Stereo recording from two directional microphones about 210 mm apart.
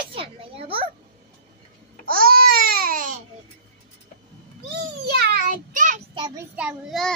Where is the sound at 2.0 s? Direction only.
45° right (ahead or behind).